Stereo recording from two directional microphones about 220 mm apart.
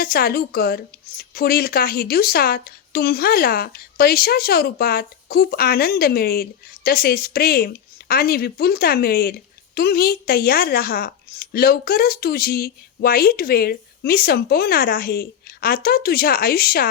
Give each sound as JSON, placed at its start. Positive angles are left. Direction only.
{"t": 0.0, "sound": "speech", "side_deg": 45}